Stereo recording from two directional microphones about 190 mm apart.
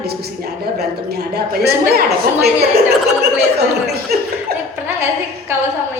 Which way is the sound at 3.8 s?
55° right (ahead or behind).